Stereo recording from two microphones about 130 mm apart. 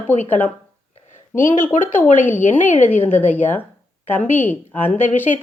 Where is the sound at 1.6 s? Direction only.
20° left (ahead or behind).